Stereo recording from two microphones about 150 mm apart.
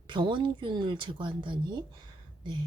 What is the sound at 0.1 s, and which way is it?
Speech, 30° right (ahead or behind).